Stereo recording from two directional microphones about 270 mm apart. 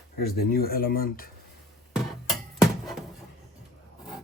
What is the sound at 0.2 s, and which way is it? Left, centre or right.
Speech, left.